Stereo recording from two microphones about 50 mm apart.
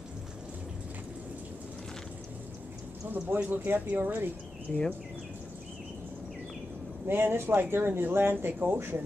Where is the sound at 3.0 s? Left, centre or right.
Right.